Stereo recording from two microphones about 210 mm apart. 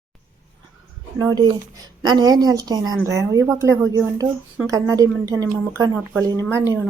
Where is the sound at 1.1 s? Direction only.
20° right (ahead or behind).